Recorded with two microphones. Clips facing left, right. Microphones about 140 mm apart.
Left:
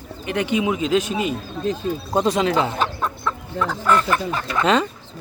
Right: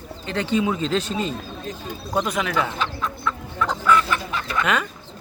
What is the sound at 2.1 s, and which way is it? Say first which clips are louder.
Speech: left 4 dB; 30° left (ahead or behind).